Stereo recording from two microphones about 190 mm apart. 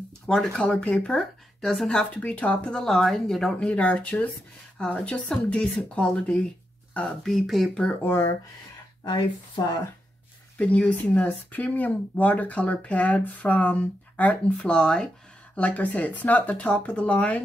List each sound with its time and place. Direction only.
0.3 s speech: 5° left (ahead or behind); by 9.7 s 20° left (ahead or behind)
10.6 s speech: 5° left (ahead or behind)